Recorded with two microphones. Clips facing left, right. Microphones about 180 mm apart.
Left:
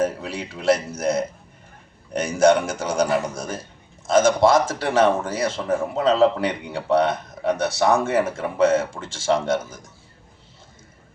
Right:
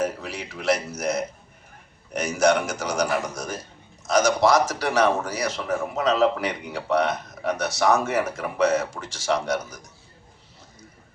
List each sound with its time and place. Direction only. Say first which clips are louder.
0.0 s a man's voice: left 3 dB; 30° left (ahead or behind)